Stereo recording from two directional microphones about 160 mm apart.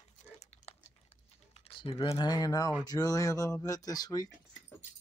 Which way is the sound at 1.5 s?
35° left (ahead or behind).